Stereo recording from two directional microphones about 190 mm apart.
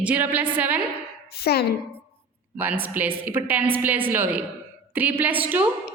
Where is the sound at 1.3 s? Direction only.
55° left (ahead or behind).